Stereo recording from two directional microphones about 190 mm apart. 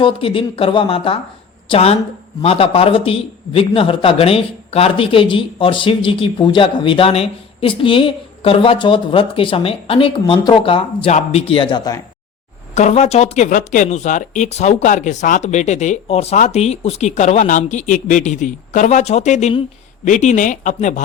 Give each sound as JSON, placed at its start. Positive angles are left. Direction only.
{"t": 0.0, "sound": "a man's voice", "side_deg": 30}
{"t": 12.7, "sound": "speech", "side_deg": 35}